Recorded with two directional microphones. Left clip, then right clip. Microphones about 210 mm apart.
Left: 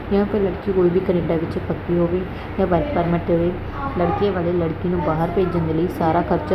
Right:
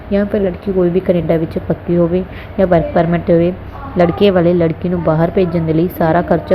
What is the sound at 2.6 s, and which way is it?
Speech, 25° right (ahead or behind).